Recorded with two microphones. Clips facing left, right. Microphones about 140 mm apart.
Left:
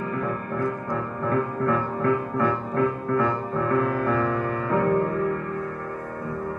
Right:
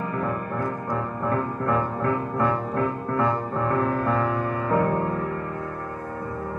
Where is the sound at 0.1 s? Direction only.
30° right (ahead or behind).